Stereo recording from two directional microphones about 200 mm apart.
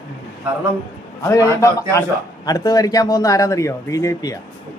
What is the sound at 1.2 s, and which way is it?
A man's voice, 15° left (ahead or behind).